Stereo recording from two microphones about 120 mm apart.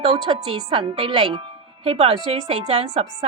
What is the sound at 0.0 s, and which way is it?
A woman's voice, 60° right (ahead or behind).